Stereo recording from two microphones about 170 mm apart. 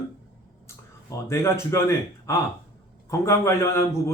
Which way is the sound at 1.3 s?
15° left (ahead or behind).